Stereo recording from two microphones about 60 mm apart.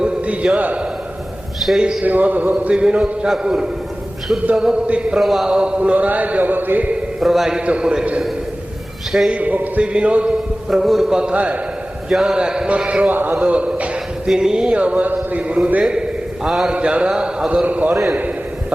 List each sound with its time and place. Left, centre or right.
0.0 s a sound: right
0.5 s a man's voice: right
1.5 s a man's voice: centre
1.8 s a man's voice: centre
2.0 s a man's voice: right
5.1 s a man's voice: centre
5.5 s a man's voice: centre
7.2 s a man's voice: centre
7.5 s a man's voice: centre
9.3 s a man's voice: right
10.7 s a man's voice: centre
12.0 s a man's voice: centre
14.3 s a man's voice: centre
16.7 s a man's voice: centre